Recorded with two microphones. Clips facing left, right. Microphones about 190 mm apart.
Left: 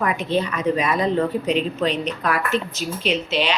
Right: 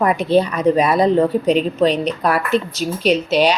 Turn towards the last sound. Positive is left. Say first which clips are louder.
# right 7 dB
turn(degrees=-40)  # may be behind; listen again after turning